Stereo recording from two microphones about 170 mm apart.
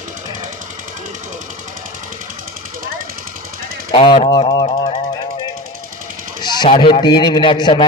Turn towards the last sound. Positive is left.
turn(degrees=30)  # may be behind; listen again after turning